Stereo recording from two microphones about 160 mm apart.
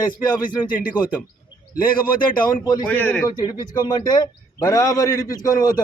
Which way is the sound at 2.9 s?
10° left (ahead or behind).